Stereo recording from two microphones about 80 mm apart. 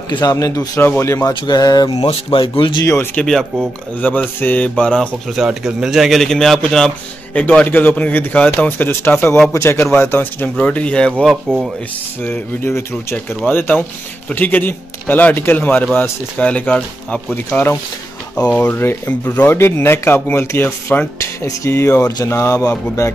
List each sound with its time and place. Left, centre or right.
0.2 s speech: left
0.7 s speech: left
1.5 s speech: left
3.2 s mantra: centre
5.3 s speech: centre
7.3 s speech: centre
10.5 s mantra: centre
11.2 s speech: centre
12.2 s speech: left
21.2 s speech: left